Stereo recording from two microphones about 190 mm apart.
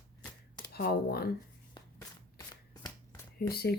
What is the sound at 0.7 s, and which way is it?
Speech, 55° left (ahead or behind).